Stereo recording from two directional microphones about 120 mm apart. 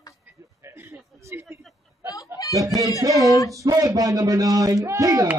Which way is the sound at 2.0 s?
30° left (ahead or behind).